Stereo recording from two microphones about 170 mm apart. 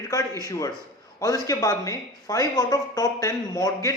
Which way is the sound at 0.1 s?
20° left (ahead or behind).